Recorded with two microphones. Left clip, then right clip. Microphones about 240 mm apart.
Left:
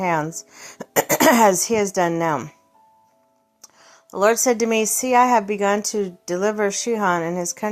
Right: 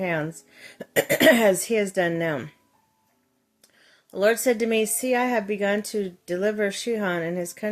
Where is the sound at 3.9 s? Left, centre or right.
Centre.